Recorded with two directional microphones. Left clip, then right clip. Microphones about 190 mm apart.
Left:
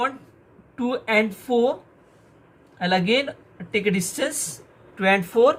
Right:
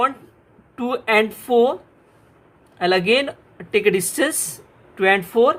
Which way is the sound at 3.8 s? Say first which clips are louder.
Right 7 dB; 35° right (ahead or behind).